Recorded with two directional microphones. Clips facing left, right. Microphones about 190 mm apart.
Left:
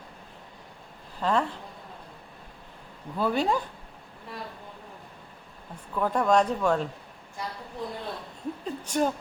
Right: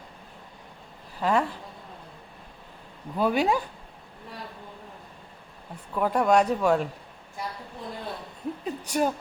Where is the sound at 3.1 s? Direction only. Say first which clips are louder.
Right 2 dB; 15° right (ahead or behind).